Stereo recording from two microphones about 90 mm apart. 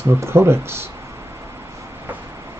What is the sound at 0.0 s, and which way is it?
Speech, 25° right (ahead or behind).